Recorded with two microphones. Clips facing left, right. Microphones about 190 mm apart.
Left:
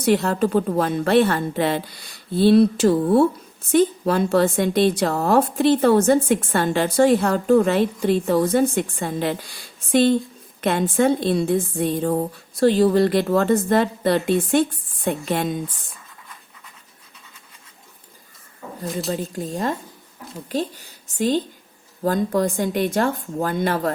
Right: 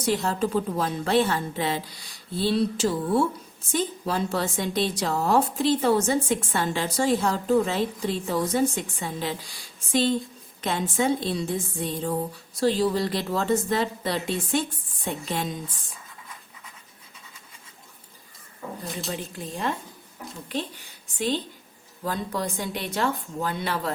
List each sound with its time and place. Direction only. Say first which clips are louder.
0.0 s a woman's voice: left 6 dB; 60° left (ahead or behind)
18.9 s speech: left 11 dB; 40° left (ahead or behind)